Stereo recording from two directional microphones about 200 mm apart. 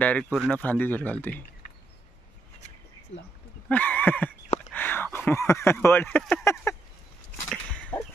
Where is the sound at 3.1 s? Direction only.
30° left (ahead or behind).